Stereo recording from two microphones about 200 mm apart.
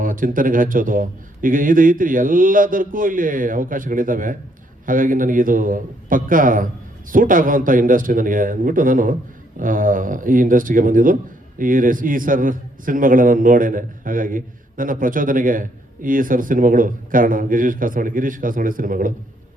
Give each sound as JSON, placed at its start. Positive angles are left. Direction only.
{"t": 0.0, "sound": "speech", "side_deg": -45}